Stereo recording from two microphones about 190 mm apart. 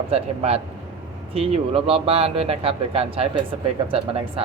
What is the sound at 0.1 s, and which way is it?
Speech, 35° right (ahead or behind).